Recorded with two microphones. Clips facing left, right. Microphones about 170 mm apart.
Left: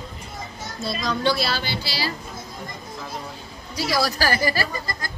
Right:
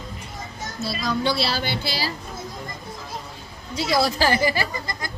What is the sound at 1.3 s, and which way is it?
Speech, 35° right (ahead or behind).